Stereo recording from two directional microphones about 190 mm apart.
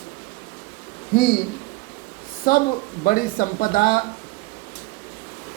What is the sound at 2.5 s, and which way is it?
Speech, 50° left (ahead or behind).